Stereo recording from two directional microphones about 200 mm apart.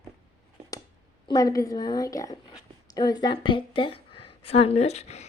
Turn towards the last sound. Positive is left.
turn(degrees=30)  # may be behind; listen again after turning